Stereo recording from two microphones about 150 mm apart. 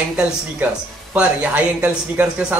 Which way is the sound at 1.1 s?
10° right (ahead or behind).